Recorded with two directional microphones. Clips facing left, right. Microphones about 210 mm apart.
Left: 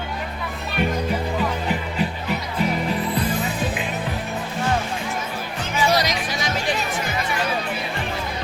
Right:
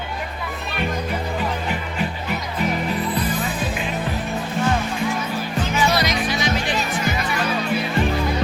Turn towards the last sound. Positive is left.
turn(degrees=40)  # may be behind; listen again after turning